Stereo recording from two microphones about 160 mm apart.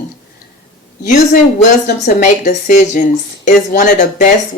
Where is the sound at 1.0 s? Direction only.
60° left (ahead or behind).